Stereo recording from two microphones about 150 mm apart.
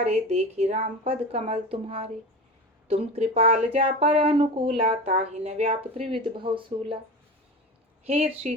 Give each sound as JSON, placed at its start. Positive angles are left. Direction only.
{"t": 0.0, "sound": "speech", "side_deg": -45}
{"t": 8.0, "sound": "speech", "side_deg": -45}